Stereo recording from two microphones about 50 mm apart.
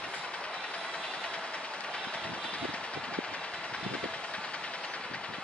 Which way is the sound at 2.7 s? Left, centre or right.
Left.